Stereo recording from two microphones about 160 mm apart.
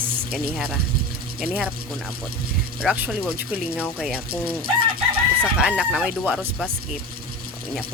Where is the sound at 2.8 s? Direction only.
5° right (ahead or behind).